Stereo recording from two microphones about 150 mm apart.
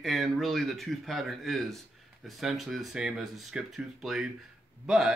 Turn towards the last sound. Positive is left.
turn(degrees=-5)  # may be behind; listen again after turning